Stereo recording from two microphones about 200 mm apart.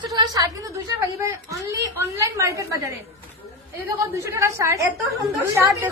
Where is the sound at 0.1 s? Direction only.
20° right (ahead or behind).